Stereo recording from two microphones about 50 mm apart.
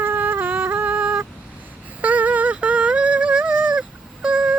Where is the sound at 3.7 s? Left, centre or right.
Centre.